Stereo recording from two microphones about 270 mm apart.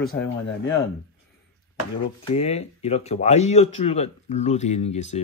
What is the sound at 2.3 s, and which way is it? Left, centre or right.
Speech, left.